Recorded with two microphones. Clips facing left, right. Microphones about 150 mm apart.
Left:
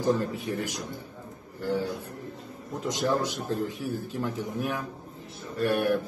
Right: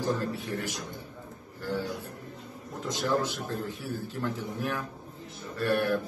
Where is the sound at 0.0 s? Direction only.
15° left (ahead or behind).